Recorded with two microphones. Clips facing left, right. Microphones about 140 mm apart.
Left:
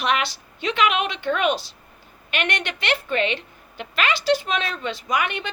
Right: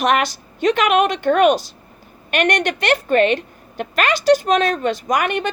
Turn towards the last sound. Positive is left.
turn(degrees=-45)  # may be behind; listen again after turning